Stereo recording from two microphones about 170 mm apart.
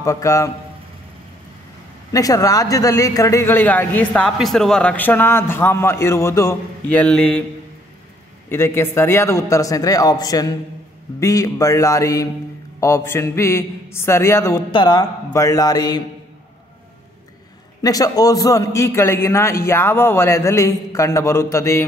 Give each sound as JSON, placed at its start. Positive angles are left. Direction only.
{"t": 0.0, "sound": "a man's voice", "side_deg": 20}
{"t": 2.1, "sound": "a man's voice", "side_deg": 20}
{"t": 8.5, "sound": "a man's voice", "side_deg": 15}
{"t": 17.8, "sound": "a man's voice", "side_deg": 20}